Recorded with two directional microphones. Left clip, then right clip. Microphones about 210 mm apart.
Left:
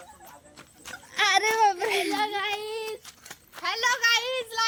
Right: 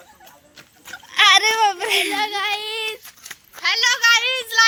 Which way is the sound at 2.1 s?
30° right (ahead or behind).